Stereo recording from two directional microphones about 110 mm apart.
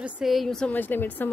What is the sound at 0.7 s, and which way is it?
Speech, 15° left (ahead or behind).